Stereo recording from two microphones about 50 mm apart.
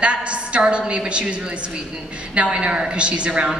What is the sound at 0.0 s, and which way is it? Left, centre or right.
A woman's voice, right.